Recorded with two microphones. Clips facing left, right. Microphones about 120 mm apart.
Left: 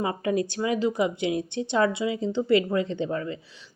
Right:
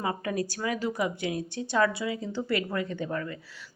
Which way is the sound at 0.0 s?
25° left (ahead or behind).